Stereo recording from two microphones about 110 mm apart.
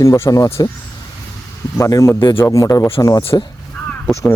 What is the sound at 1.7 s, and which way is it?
Speech, 25° left (ahead or behind).